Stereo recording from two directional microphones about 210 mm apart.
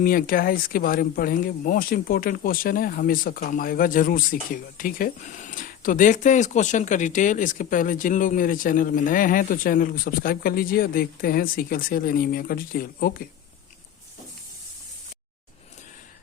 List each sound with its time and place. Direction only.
0.0 s speech: 40° left (ahead or behind)